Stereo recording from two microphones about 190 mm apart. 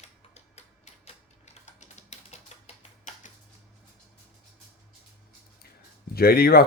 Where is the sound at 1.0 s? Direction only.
35° left (ahead or behind).